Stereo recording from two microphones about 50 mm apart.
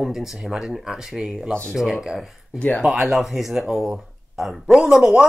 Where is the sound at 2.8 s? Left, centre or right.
Centre.